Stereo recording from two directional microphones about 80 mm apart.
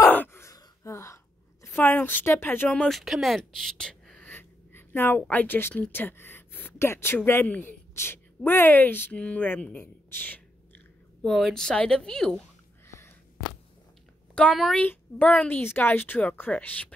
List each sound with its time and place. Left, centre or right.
0.1 s gasp: left
0.8 s a sound: left
1.7 s speech: left
2.7 s speech: centre
4.3 s a sound: left
5.3 s speech: left
7.4 s speech: centre
7.9 s a woman's voice: left
10.0 s a sound: left
11.2 s speech: centre
12.8 s a sound: left
14.5 s a woman's voice: centre
14.8 s speech: centre